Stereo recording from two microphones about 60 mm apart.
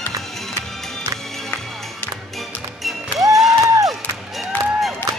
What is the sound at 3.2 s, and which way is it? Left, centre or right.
Music, right.